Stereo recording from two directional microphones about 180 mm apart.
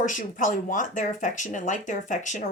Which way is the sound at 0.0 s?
45° left (ahead or behind).